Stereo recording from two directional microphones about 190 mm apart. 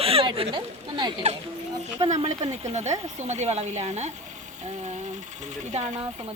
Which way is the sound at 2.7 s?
35° right (ahead or behind).